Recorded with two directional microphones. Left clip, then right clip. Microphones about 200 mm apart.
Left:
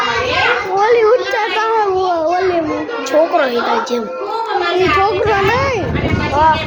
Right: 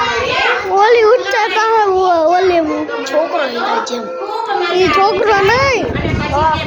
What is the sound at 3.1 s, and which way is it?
Speech, 45° left (ahead or behind).